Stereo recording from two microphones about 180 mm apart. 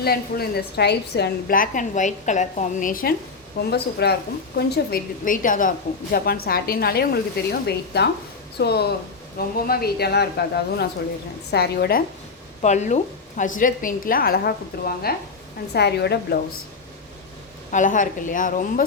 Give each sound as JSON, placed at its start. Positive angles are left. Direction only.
{"t": 0.0, "sound": "a woman's voice", "side_deg": 60}
{"t": 3.6, "sound": "a woman's voice", "side_deg": 65}
{"t": 12.6, "sound": "a woman's voice", "side_deg": 40}
{"t": 17.7, "sound": "a woman's voice", "side_deg": 45}